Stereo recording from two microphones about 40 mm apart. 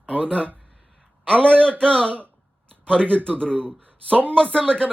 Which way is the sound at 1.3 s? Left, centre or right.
Left.